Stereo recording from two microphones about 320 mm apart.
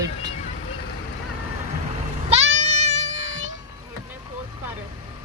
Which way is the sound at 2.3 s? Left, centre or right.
Right.